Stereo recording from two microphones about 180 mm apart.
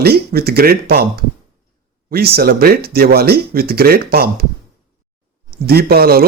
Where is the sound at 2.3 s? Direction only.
60° right (ahead or behind).